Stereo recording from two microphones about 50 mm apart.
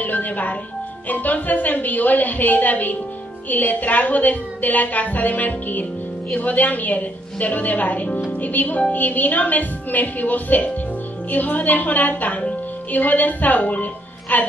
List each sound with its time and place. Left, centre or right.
0.0 s music: left
1.0 s a woman's voice: left